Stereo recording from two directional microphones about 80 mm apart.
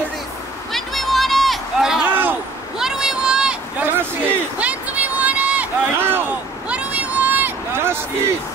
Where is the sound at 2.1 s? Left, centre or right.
Right.